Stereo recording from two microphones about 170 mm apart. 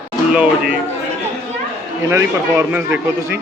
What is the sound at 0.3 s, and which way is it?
Speech, 5° right (ahead or behind).